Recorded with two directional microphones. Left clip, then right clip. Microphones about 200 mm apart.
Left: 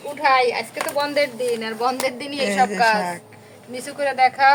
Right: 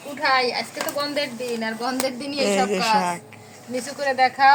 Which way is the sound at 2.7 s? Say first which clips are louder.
Left 2 dB; 10° right (ahead or behind).